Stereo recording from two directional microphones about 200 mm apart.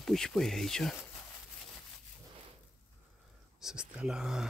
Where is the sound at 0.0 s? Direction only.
Centre (ahead or behind).